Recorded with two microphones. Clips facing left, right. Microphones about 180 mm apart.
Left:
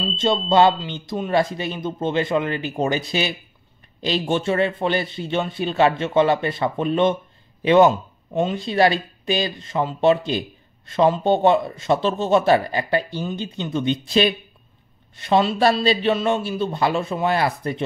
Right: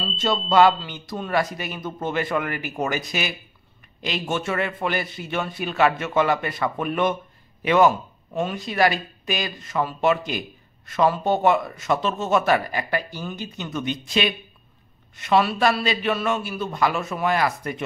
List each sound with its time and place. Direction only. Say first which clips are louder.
0.1 s speech: left 2 dB; 25° left (ahead or behind)